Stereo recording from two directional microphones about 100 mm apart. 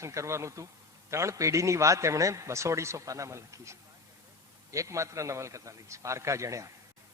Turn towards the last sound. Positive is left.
turn(degrees=-30)  # may be behind; listen again after turning